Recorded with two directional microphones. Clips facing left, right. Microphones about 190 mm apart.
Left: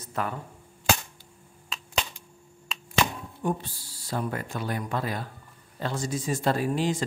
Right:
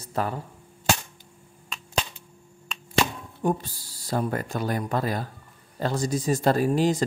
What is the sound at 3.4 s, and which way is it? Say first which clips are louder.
Speech: right 4 dB; 40° right (ahead or behind).